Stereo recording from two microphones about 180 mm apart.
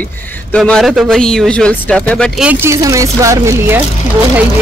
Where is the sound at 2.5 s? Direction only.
15° right (ahead or behind).